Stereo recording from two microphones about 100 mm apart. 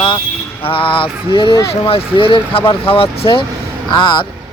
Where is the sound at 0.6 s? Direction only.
60° left (ahead or behind).